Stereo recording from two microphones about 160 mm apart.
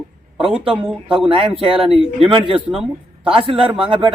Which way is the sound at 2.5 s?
5° right (ahead or behind).